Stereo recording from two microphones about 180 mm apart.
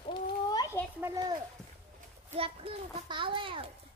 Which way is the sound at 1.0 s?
20° right (ahead or behind).